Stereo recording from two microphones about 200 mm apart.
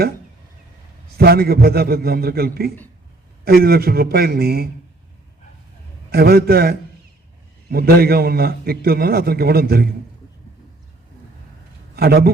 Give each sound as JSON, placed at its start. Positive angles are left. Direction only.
{"t": 1.1, "sound": "a man's voice", "side_deg": -50}
{"t": 6.1, "sound": "a man's voice", "side_deg": -50}
{"t": 11.9, "sound": "a man's voice", "side_deg": -50}